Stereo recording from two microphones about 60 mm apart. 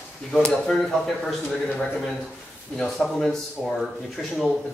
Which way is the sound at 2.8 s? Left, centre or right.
Centre.